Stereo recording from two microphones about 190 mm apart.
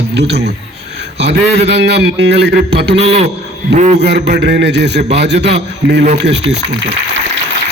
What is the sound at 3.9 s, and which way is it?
A man's voice, 65° right (ahead or behind).